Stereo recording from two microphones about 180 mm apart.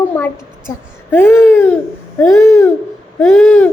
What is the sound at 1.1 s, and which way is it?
A woman's voice, 10° left (ahead or behind).